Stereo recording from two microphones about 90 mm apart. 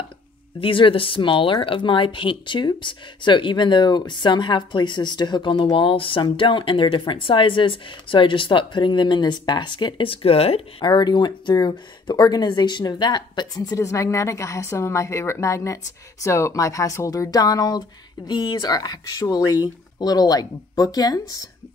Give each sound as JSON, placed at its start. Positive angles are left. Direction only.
{"t": 0.6, "sound": "speech", "side_deg": 75}
{"t": 10.9, "sound": "speech", "side_deg": 55}